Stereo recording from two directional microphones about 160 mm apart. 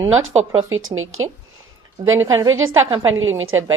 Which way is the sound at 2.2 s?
20° right (ahead or behind).